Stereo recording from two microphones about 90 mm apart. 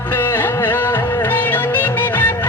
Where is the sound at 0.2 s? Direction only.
25° left (ahead or behind).